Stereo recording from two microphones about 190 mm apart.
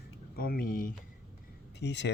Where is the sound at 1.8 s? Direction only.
65° left (ahead or behind).